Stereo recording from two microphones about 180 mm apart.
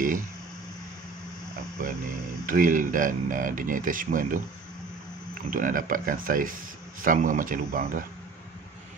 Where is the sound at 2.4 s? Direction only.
50° right (ahead or behind).